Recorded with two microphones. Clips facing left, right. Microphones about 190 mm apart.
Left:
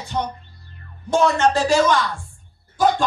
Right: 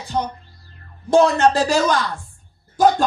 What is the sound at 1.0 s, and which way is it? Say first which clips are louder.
Speech: right 3 dB; 35° right (ahead or behind).